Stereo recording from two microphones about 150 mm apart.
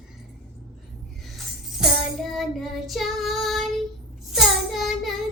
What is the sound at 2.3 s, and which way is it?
Child singing, centre (ahead or behind).